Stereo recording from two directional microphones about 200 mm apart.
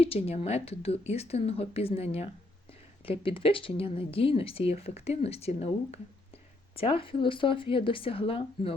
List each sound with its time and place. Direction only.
0.0 s speech: 30° left (ahead or behind)